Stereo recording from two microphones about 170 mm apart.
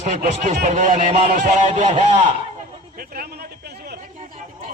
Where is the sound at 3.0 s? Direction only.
60° right (ahead or behind).